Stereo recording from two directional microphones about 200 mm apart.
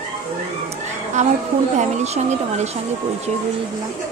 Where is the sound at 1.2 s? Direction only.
35° right (ahead or behind).